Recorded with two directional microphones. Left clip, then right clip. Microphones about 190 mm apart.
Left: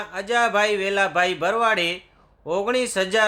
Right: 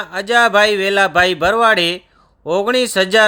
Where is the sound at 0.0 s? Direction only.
35° right (ahead or behind).